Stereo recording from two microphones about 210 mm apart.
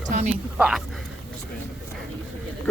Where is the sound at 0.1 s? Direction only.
35° right (ahead or behind).